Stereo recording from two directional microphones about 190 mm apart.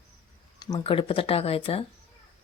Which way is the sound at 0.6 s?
25° left (ahead or behind).